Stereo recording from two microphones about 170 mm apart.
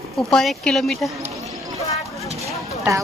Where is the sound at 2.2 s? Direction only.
40° right (ahead or behind).